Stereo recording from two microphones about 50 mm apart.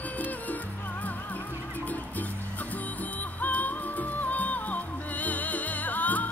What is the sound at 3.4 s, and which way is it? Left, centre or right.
Music, left.